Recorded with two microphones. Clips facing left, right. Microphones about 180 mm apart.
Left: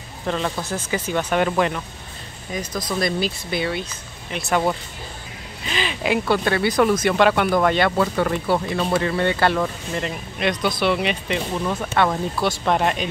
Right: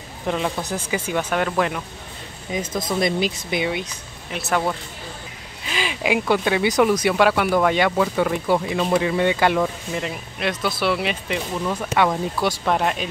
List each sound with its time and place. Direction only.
0.3 s speech: 15° right (ahead or behind)
2.5 s speech: 25° right (ahead or behind)
4.3 s speech: 5° right (ahead or behind)
11.9 s speech: 10° right (ahead or behind)